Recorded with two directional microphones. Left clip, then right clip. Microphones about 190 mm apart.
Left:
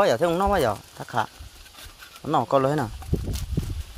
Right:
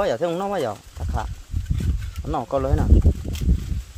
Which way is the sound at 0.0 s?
Centre (ahead or behind).